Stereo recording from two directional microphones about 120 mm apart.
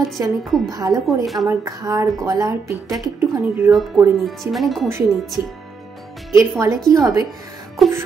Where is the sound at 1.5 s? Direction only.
25° right (ahead or behind).